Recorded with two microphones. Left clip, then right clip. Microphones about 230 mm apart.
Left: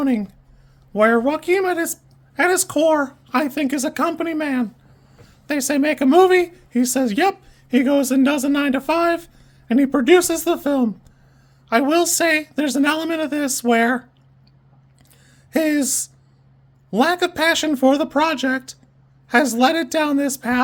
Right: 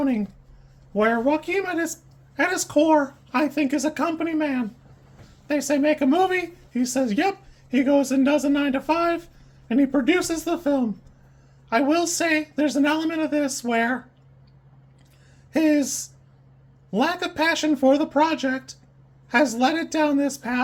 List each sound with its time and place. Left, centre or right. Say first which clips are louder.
0.9 s speech: left 4 dB; left
15.5 s speech: left 1 dB; left
16.9 s speech: left 6 dB; left